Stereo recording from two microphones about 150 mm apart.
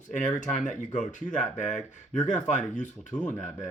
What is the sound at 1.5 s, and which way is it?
Speech, 55° left (ahead or behind).